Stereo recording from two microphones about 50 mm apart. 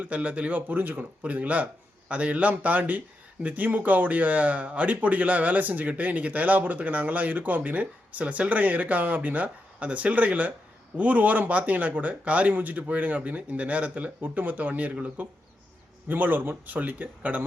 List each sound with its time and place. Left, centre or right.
0.0 s speech: right
0.8 s speech: right
1.2 s speech: right
14.2 s speech: right